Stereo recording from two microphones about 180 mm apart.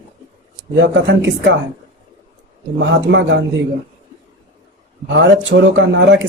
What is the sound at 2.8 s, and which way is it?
Speech, 80° right.